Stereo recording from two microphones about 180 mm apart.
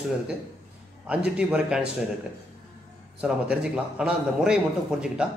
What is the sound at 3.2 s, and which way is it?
A man's voice, 5° right (ahead or behind).